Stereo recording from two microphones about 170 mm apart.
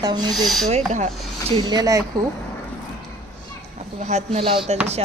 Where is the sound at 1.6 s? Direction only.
20° right (ahead or behind).